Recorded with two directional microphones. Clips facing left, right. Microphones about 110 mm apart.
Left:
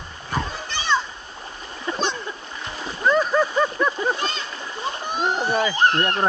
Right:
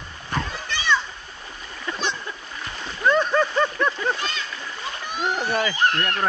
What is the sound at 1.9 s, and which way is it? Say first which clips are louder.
Splash: left 3 dB; 30° left (ahead or behind).